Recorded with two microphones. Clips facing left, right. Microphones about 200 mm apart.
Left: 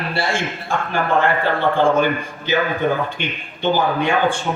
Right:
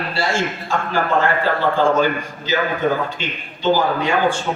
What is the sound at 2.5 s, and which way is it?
A man's voice, 60° left (ahead or behind).